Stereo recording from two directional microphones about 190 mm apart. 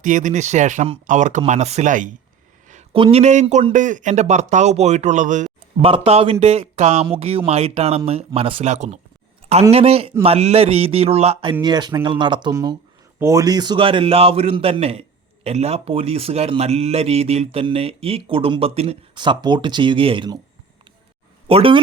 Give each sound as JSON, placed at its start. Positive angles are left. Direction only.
{"t": 0.0, "sound": "speech", "side_deg": -40}
{"t": 2.9, "sound": "a man's voice", "side_deg": -30}
{"t": 21.4, "sound": "speech", "side_deg": -30}